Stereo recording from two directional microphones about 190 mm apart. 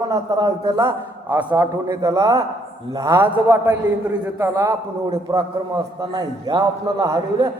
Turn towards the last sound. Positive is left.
turn(degrees=-20)  # may be behind; listen again after turning